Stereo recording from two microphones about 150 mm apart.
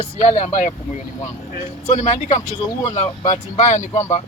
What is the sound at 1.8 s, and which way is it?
Speech, 50° left (ahead or behind).